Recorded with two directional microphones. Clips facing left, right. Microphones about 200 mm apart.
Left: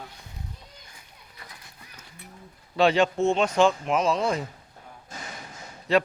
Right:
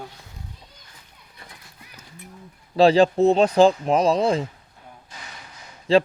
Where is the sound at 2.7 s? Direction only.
35° right (ahead or behind).